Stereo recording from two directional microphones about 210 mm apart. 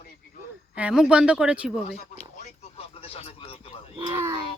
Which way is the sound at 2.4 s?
30° left (ahead or behind).